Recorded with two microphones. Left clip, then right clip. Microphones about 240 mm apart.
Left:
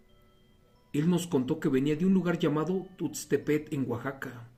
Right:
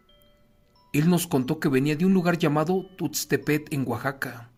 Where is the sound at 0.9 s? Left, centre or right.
Right.